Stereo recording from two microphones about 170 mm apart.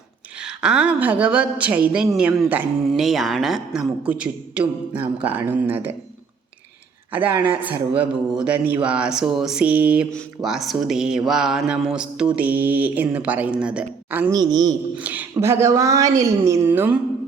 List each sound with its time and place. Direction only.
0.4 s speech: 5° right (ahead or behind)
7.2 s speech: 30° right (ahead or behind)
7.9 s speech: 5° right (ahead or behind)
14.3 s speech: 25° right (ahead or behind)
14.9 s speech: 10° right (ahead or behind)